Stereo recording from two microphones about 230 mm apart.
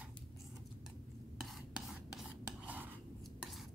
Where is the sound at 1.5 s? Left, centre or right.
Centre.